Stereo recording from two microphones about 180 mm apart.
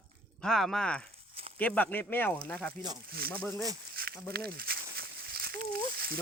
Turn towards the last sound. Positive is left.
turn(degrees=-60)  # may be behind; listen again after turning